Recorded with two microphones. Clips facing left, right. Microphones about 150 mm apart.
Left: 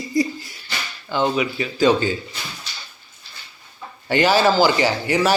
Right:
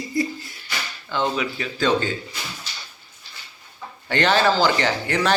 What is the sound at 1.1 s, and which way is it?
Speech, 5° left (ahead or behind).